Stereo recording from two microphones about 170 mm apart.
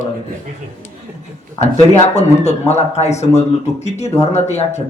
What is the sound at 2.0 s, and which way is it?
A man's voice, 40° left (ahead or behind).